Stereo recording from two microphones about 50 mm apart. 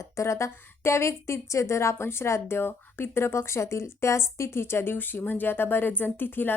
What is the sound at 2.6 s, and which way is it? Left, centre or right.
Speech, left.